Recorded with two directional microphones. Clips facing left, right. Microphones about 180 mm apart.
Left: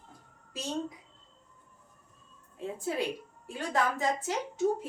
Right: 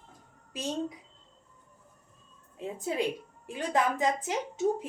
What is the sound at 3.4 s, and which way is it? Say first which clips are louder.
Speech: right 2 dB; 20° right (ahead or behind).